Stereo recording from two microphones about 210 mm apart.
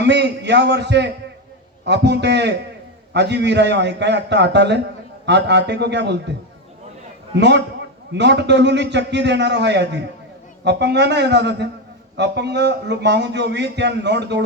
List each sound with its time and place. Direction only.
0.0 s a man's voice: 55° right (ahead or behind)
7.3 s a man's voice: 55° right (ahead or behind)